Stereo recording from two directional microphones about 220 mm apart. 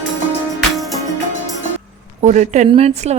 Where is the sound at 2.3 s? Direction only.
35° right (ahead or behind).